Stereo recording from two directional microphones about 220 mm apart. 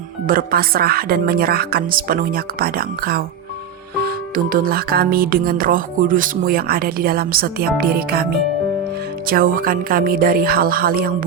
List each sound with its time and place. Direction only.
0.3 s speech: 40° right (ahead or behind)
4.0 s music: 40° right (ahead or behind)